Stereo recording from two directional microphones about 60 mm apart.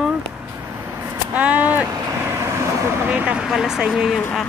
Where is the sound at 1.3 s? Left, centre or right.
Right.